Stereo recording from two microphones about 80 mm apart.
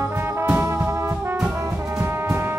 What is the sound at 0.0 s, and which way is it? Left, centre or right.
Brass instrument, right.